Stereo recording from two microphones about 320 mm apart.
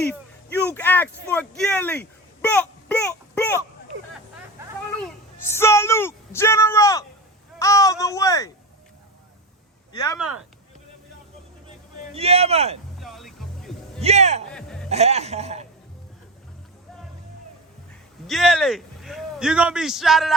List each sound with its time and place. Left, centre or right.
0.1 s speech: centre
4.9 s speech: centre
12.1 s a man's voice: centre
13.0 s music: centre
14.0 s a man's voice: right
14.5 s music: centre
14.8 s a man's voice: centre
18.3 s a man's voice: centre